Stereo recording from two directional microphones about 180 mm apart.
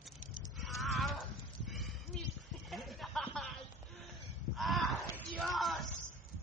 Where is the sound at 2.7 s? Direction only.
Centre (ahead or behind).